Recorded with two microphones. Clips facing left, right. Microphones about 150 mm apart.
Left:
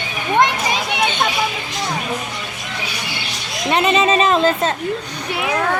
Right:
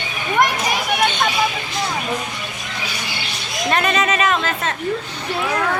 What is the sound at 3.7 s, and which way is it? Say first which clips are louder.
Speech: left 3 dB; 20° left (ahead or behind).